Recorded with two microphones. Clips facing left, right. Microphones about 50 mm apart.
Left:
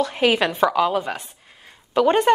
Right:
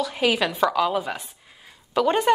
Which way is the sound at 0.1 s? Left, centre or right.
Centre.